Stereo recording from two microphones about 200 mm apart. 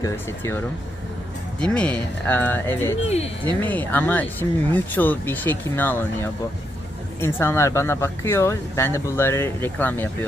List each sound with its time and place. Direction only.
0.0 s speech: 15° left (ahead or behind)
1.6 s speech: 5° left (ahead or behind)
3.1 s speech: 30° left (ahead or behind)
3.4 s speech: 10° left (ahead or behind)